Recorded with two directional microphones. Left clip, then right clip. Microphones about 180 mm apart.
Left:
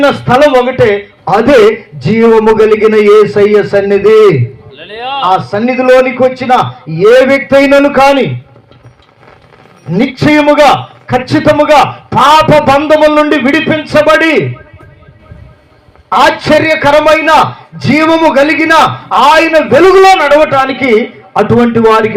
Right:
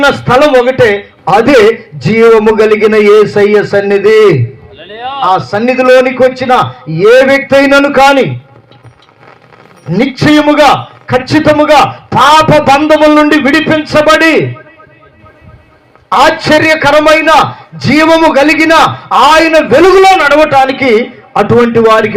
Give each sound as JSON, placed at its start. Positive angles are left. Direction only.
{"t": 0.0, "sound": "a man's voice", "side_deg": -35}
{"t": 4.8, "sound": "a sound", "side_deg": 30}
{"t": 5.3, "sound": "a man's voice", "side_deg": -35}
{"t": 9.8, "sound": "a man's voice", "side_deg": -30}
{"t": 16.0, "sound": "a man's voice", "side_deg": -35}